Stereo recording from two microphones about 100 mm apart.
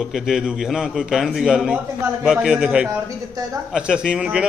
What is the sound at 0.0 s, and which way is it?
A man's voice, 5° right (ahead or behind).